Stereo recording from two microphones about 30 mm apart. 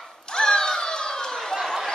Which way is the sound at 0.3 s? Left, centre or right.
Left.